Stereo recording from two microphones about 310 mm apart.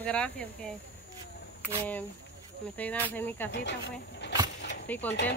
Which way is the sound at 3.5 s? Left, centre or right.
Left.